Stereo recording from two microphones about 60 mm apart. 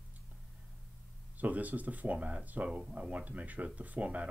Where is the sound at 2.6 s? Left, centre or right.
Centre.